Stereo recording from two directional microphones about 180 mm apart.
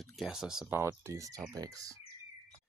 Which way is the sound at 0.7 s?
15° right (ahead or behind).